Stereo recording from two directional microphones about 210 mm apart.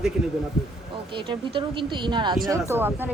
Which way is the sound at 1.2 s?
25° right (ahead or behind).